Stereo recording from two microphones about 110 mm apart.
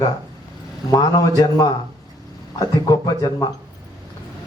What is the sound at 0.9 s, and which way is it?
A man's voice, 35° left (ahead or behind).